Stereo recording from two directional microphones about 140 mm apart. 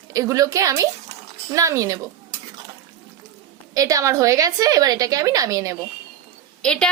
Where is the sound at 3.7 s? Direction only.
25° right (ahead or behind).